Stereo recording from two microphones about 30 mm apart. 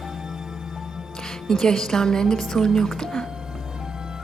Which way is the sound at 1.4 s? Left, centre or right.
Centre.